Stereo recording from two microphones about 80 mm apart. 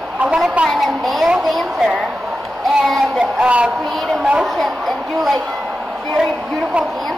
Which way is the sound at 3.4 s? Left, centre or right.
Centre.